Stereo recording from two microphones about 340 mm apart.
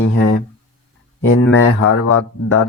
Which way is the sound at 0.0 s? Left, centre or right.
Left.